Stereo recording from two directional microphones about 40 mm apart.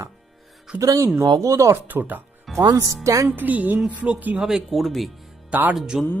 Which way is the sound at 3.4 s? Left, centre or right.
Right.